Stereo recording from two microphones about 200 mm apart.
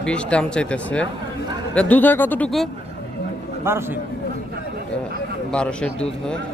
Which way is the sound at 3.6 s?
10° right (ahead or behind).